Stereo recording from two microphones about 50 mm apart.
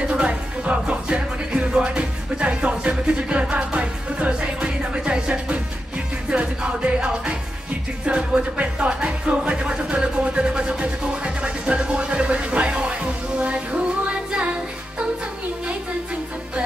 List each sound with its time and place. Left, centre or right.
0.1 s music: right